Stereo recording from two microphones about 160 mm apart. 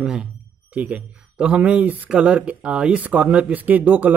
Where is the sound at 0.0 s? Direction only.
5° right (ahead or behind).